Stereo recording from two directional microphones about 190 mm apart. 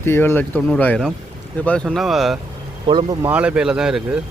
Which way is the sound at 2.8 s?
20° right (ahead or behind).